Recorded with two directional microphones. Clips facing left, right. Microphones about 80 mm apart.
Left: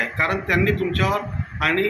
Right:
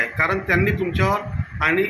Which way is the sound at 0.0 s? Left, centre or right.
Centre.